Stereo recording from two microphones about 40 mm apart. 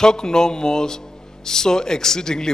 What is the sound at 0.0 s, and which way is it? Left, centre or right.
A man's voice, centre.